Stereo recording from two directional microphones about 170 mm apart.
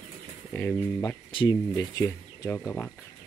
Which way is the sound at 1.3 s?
30° left (ahead or behind).